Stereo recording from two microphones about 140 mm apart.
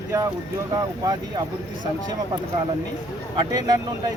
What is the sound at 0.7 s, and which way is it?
Speech, 25° right (ahead or behind).